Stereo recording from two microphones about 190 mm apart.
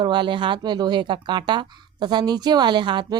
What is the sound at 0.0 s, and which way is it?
A woman's voice, 25° right (ahead or behind).